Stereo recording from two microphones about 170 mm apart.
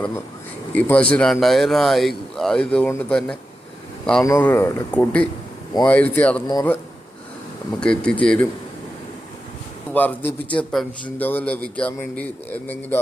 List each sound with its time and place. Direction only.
0.7 s speech: 10° left (ahead or behind)
4.2 s a man's voice: 15° left (ahead or behind)
6.5 s a man's voice: 20° left (ahead or behind)
7.8 s speech: 5° left (ahead or behind)
9.9 s a man's voice: 10° left (ahead or behind)